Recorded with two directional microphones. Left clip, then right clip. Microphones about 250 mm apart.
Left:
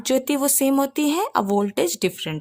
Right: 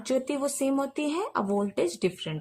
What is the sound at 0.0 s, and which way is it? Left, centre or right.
Speech, left.